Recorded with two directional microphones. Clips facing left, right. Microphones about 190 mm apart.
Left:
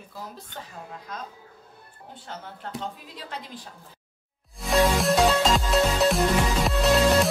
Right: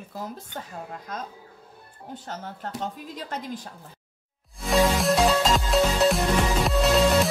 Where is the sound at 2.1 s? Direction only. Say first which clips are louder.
Right 4 dB; 40° right (ahead or behind).